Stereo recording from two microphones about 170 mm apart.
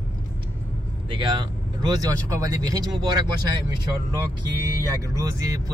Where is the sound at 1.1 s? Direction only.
30° right (ahead or behind).